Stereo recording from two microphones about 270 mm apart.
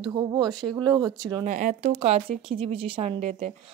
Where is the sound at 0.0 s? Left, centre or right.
Centre.